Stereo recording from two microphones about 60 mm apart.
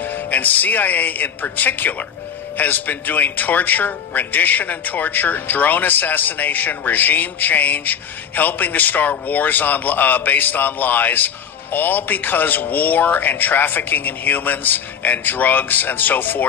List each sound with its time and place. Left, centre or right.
0.0 s a man's voice: left